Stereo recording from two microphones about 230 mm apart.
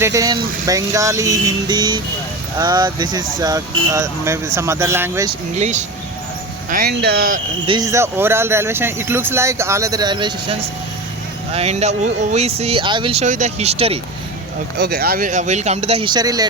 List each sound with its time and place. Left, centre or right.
0.0 s speech: centre
5.5 s speech: right
7.7 s speech: centre
11.5 s speech: right
14.8 s speech: right; by 16.5 s centre